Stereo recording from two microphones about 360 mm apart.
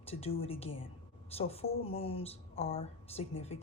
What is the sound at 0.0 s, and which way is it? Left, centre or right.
A woman's voice, centre.